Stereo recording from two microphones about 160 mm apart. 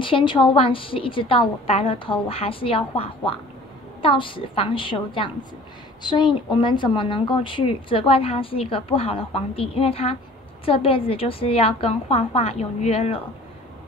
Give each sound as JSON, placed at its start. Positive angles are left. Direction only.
{"t": 0.0, "sound": "speech", "side_deg": 30}